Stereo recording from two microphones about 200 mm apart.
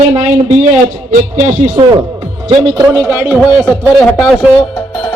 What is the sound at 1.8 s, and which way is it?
A man's voice, 25° right (ahead or behind).